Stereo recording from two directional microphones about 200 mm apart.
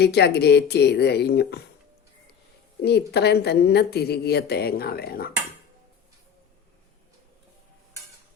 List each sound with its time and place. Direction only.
0.0 s speech: 55° left (ahead or behind)
2.8 s a woman's voice: 55° left (ahead or behind)